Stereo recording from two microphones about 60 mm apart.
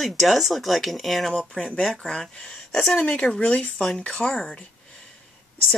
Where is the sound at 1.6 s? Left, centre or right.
Centre.